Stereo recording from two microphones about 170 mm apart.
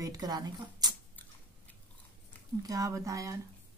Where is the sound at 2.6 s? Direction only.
20° right (ahead or behind).